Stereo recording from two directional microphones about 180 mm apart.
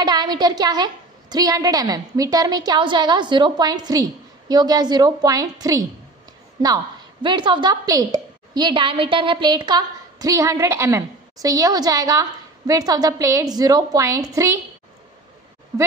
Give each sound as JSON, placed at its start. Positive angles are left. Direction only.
{"t": 0.0, "sound": "a woman's voice", "side_deg": -25}
{"t": 7.2, "sound": "a woman's voice", "side_deg": -25}
{"t": 15.7, "sound": "speech", "side_deg": -15}